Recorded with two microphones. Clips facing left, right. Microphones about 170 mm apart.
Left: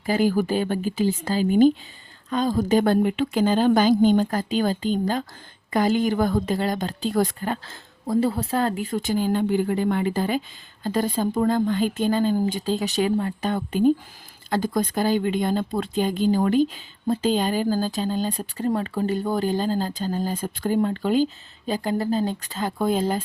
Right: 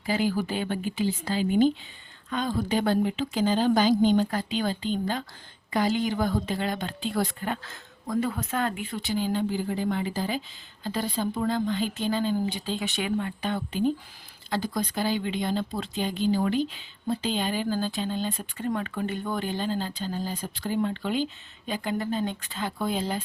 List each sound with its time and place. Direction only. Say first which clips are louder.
0.0 s speech: left 5 dB; 45° left (ahead or behind)